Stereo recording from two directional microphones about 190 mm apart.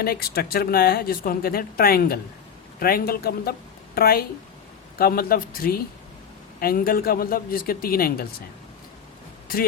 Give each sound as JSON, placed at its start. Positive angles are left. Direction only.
{"t": 0.0, "sound": "speech", "side_deg": 55}